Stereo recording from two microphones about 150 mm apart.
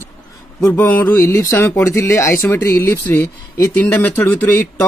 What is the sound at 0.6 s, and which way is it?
A man's voice, 15° left (ahead or behind).